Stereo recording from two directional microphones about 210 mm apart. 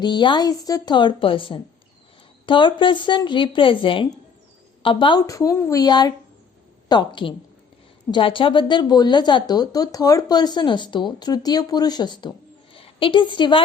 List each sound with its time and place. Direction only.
0.0 s a woman's voice: 20° left (ahead or behind)